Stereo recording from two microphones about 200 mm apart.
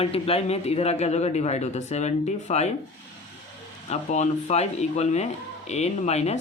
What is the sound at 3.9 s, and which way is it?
Speech, 35° left (ahead or behind).